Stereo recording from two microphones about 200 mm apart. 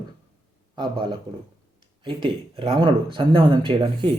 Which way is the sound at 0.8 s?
25° right (ahead or behind).